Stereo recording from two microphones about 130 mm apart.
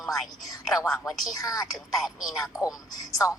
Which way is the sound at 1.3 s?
25° left (ahead or behind).